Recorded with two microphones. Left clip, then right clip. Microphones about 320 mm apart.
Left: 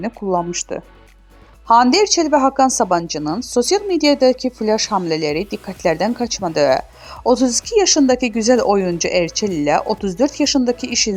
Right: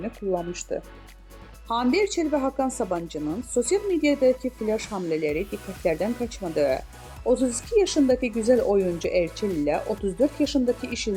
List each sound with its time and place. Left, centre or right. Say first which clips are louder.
0.0 s a woman's voice: left 8 dB; left
7.2 s a woman's voice: left 7 dB; left
7.7 s speech: left 6 dB; left